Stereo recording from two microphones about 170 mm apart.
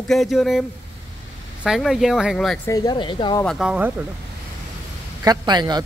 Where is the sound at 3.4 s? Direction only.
5° right (ahead or behind).